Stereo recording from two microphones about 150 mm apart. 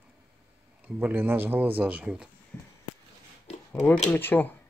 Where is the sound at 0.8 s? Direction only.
10° right (ahead or behind).